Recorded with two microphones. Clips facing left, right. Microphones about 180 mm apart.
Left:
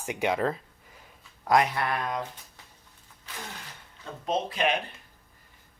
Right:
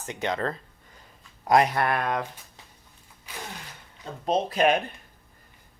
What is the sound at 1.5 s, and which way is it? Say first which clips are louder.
Speech: right 3 dB; 45° right (ahead or behind).